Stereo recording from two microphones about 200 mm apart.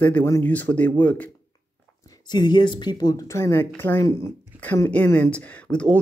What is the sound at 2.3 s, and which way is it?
Speech, 20° left (ahead or behind).